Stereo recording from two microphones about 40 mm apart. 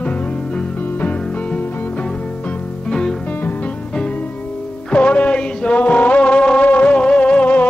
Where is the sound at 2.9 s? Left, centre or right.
Centre.